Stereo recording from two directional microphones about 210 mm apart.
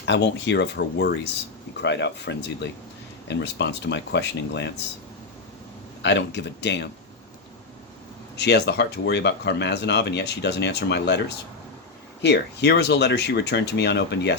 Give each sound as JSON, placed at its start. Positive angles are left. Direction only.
{"t": 0.0, "sound": "speech", "side_deg": 60}
{"t": 6.0, "sound": "speech", "side_deg": 55}
{"t": 8.4, "sound": "speech", "side_deg": 55}
{"t": 12.2, "sound": "speech", "side_deg": 55}